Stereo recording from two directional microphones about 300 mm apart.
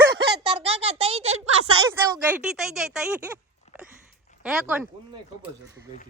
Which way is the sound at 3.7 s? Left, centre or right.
Left.